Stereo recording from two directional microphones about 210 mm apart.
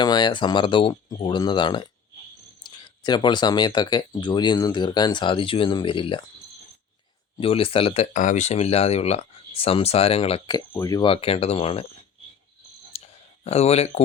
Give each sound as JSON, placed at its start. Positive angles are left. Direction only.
{"t": 0.0, "sound": "speech", "side_deg": 20}
{"t": 7.3, "sound": "speech", "side_deg": 25}
{"t": 8.1, "sound": "speech", "side_deg": 35}
{"t": 12.9, "sound": "a sound", "side_deg": 30}
{"t": 13.4, "sound": "speech", "side_deg": 30}